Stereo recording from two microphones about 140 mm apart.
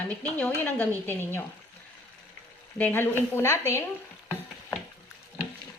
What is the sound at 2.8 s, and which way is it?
Speech, 15° left (ahead or behind).